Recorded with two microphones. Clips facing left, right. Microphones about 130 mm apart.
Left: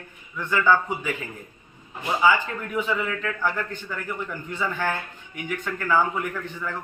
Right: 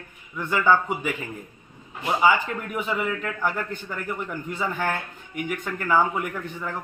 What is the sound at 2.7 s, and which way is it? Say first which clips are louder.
A man's voice: left 1 dB; 10° right (ahead or behind).